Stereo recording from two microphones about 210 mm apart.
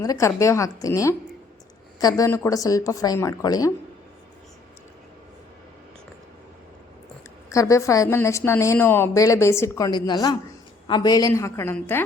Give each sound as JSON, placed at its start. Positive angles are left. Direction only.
{"t": 0.0, "sound": "a woman's voice", "side_deg": 15}
{"t": 7.5, "sound": "a woman's voice", "side_deg": 15}